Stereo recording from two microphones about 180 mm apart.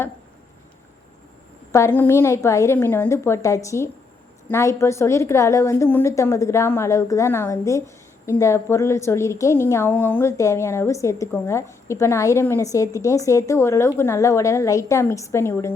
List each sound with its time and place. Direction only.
1.7 s a woman's voice: 15° left (ahead or behind)